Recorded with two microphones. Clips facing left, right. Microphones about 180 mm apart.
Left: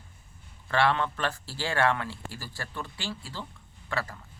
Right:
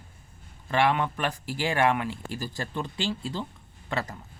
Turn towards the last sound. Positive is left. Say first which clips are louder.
# right 2 dB
turn(degrees=-20)  # may be behind; listen again after turning